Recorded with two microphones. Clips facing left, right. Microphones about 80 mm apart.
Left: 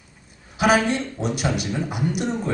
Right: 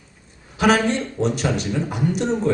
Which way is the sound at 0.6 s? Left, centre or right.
Centre.